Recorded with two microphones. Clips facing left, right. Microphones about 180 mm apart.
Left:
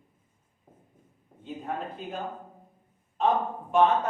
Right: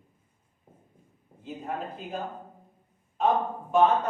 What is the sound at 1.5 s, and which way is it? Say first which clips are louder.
Speech: even; 5° right (ahead or behind).